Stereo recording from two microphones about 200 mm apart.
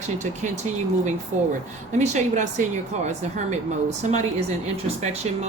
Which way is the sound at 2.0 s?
35° right (ahead or behind).